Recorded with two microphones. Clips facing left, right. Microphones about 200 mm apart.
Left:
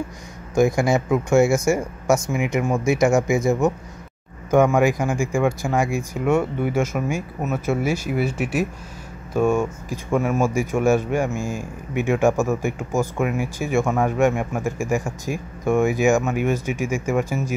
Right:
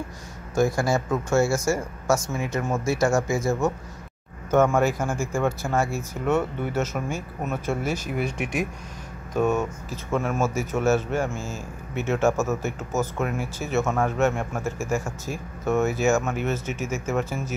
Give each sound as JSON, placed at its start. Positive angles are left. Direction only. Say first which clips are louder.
{"t": 0.6, "sound": "speech", "louder": "left 4 dB", "side_deg": 15}